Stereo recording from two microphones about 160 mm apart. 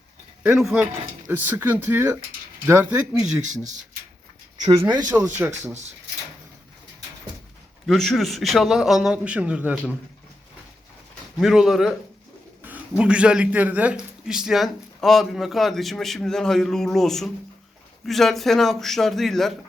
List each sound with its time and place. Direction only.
0.4 s a man's voice: 5° right (ahead or behind)
4.6 s speech: 25° right (ahead or behind)
5.0 s speech: 10° right (ahead or behind)
7.9 s a man's voice: centre (ahead or behind)
11.3 s a man's voice: centre (ahead or behind)
12.6 s a sound: 10° right (ahead or behind)
13.0 s a man's voice: 5° right (ahead or behind)